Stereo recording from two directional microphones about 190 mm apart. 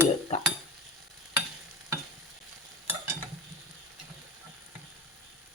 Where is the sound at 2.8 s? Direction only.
15° right (ahead or behind).